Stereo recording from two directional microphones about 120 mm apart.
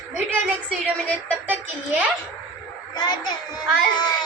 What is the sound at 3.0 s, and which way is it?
Speech, 35° left (ahead or behind).